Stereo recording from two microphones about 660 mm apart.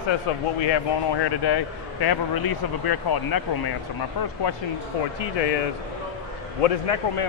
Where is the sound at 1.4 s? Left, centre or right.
Left.